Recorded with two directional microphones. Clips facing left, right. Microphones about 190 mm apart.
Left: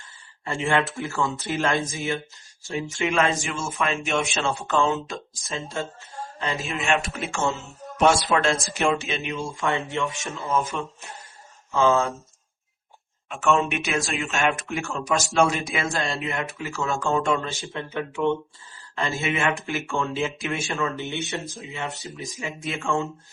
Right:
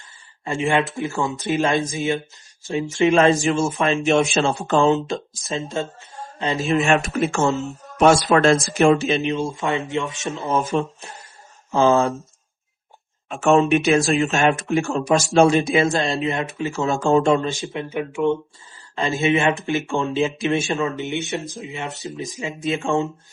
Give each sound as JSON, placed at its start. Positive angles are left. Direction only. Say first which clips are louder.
{"t": 0.4, "sound": "speech", "louder": "right 3 dB", "side_deg": -20}
{"t": 6.7, "sound": "speech", "louder": "right 8 dB", "side_deg": -45}
{"t": 13.2, "sound": "speech", "louder": "right 6 dB", "side_deg": -35}
{"t": 17.5, "sound": "speech", "louder": "right 5 dB", "side_deg": -15}